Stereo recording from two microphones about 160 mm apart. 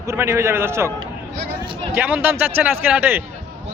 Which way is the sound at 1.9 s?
10° right (ahead or behind).